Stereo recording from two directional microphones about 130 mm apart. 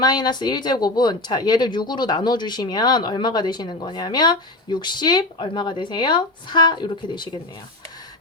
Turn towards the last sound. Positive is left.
turn(degrees=35)  # may be behind; listen again after turning